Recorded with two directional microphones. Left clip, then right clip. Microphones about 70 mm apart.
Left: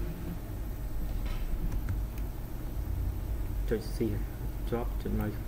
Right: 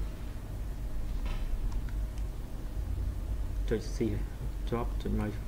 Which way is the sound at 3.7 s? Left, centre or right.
Centre.